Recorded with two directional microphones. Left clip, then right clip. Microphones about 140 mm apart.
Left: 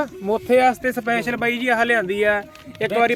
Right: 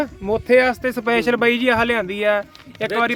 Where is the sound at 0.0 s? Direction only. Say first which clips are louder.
Right 1 dB; 30° right (ahead or behind).